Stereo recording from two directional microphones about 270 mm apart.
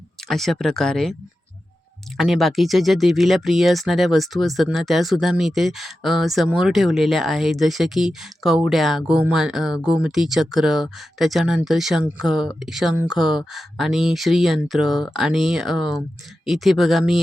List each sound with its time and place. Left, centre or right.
0.3 s speech: centre
2.1 s speech: centre